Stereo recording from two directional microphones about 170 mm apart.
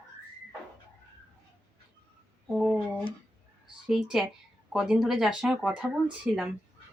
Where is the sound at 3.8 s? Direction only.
Centre (ahead or behind).